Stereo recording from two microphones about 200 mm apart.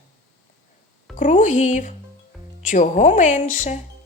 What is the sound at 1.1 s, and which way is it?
A woman's voice, 40° left (ahead or behind).